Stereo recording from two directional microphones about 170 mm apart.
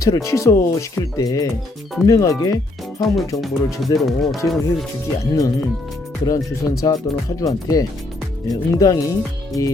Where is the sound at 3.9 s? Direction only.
Centre (ahead or behind).